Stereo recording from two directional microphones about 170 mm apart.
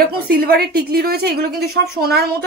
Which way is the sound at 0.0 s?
65° right (ahead or behind).